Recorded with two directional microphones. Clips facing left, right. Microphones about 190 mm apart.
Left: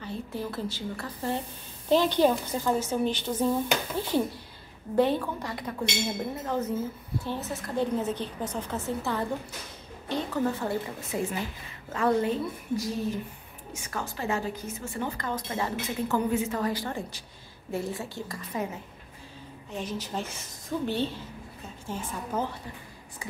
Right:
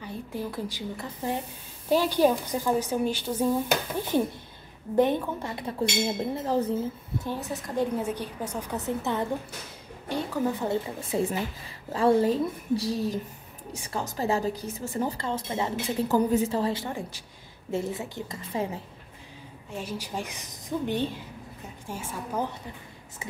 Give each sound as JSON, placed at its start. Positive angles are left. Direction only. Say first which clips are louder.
{"t": 0.0, "sound": "a woman's voice", "louder": "even", "side_deg": -15}
{"t": 7.2, "sound": "a woman's voice", "louder": "even", "side_deg": -15}
{"t": 11.0, "sound": "speech", "louder": "right 3 dB", "side_deg": -30}
{"t": 15.7, "sound": "a woman's voice", "louder": "right 5 dB", "side_deg": -35}
{"t": 19.7, "sound": "a woman's voice", "louder": "left 1 dB", "side_deg": -10}